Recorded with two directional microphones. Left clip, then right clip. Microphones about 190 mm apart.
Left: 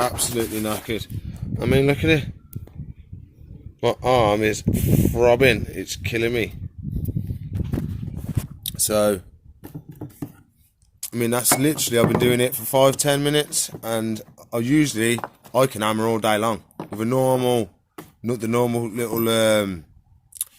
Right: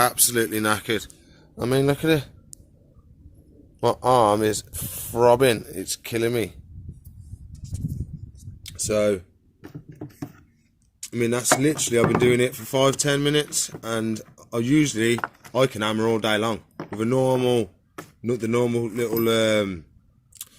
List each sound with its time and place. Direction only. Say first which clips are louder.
0.0 s speech: right 2 dB; centre (ahead or behind)
3.8 s speech: even; 5° right (ahead or behind)
8.6 s speech: left 2 dB; centre (ahead or behind)
9.6 s a sound: left 1 dB; 20° left (ahead or behind)
11.1 s speech: even; centre (ahead or behind)
20.4 s camera: left 5 dB; centre (ahead or behind)